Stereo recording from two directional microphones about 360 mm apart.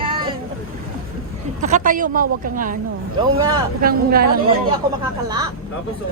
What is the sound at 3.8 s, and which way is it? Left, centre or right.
Speech, right.